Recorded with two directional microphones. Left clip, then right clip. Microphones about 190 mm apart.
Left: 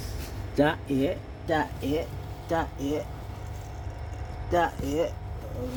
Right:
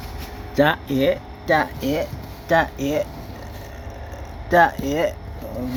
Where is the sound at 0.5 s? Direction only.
15° right (ahead or behind).